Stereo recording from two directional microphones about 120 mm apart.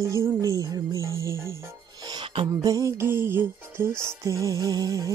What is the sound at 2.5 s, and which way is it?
Music, 30° right (ahead or behind).